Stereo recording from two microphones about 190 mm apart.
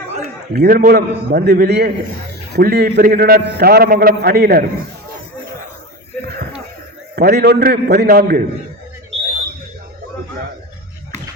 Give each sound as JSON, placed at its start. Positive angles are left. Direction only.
{"t": 0.5, "sound": "a man's voice", "side_deg": -55}
{"t": 7.2, "sound": "a man's voice", "side_deg": -60}